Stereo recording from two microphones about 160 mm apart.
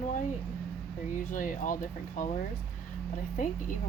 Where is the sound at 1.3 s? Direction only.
55° left (ahead or behind).